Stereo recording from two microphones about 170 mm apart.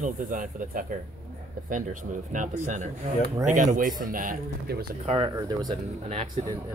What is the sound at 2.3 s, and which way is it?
Speech, 45° right (ahead or behind).